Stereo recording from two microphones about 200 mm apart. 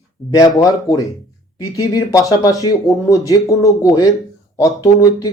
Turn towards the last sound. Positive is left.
turn(degrees=20)  # may be behind; listen again after turning